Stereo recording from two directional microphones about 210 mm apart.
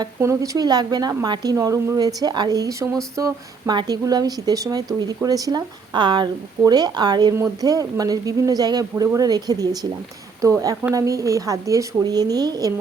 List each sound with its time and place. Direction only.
0.0 s speech: 15° right (ahead or behind)